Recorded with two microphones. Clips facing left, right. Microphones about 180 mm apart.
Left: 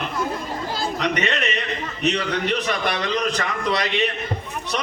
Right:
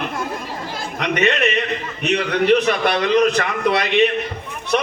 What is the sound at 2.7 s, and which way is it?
Speech, 55° right (ahead or behind).